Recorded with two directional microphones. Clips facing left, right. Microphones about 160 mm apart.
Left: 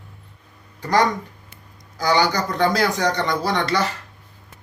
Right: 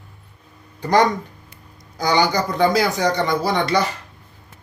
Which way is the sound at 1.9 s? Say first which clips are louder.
Right 1 dB; 15° right (ahead or behind).